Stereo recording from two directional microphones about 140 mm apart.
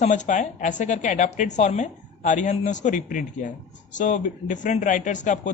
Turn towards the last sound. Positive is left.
turn(degrees=60)  # may be behind; listen again after turning